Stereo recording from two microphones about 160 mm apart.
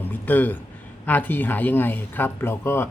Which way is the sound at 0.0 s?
10° left (ahead or behind).